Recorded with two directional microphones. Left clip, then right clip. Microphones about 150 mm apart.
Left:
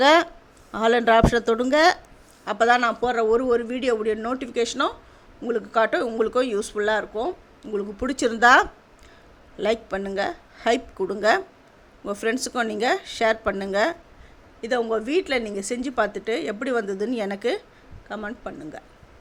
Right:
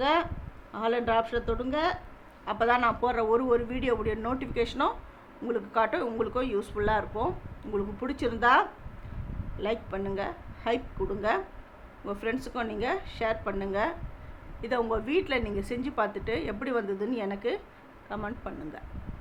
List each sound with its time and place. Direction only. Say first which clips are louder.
0.0 s speech: left 10 dB; 60° left (ahead or behind)
2.4 s a man's voice: left 6 dB; 40° left (ahead or behind)
14.6 s a man's voice: left 5 dB; 25° left (ahead or behind); by 17.6 s 45° left (ahead or behind)
18.1 s a man's voice: left 4 dB; 35° left (ahead or behind)